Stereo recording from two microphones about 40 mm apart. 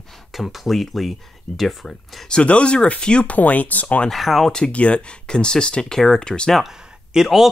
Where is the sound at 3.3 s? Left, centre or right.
Left.